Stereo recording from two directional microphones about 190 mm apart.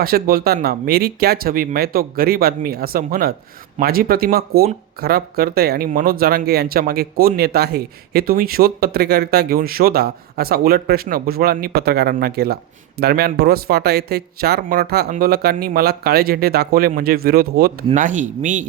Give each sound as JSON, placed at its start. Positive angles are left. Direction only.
{"t": 0.0, "sound": "speech", "side_deg": -50}
{"t": 17.9, "sound": "speech", "side_deg": -40}